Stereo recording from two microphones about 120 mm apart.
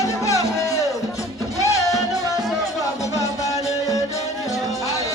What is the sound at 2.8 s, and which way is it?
Music, 25° left (ahead or behind).